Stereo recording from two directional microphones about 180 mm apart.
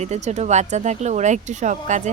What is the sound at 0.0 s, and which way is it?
Speech, 40° right (ahead or behind).